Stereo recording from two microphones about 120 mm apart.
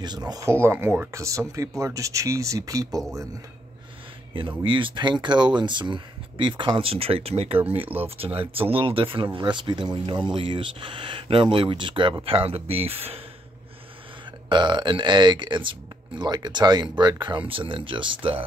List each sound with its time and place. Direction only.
0.3 s speech: 25° right (ahead or behind)
4.4 s speech: 45° right (ahead or behind)
14.5 s speech: 40° right (ahead or behind)